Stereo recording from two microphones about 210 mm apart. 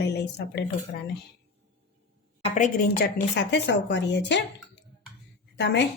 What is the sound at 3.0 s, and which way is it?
A woman's voice, 55° left (ahead or behind).